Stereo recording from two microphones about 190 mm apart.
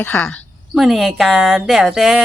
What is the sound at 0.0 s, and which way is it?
A woman's voice, 10° left (ahead or behind).